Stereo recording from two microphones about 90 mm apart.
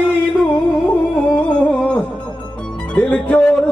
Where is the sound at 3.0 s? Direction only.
15° left (ahead or behind).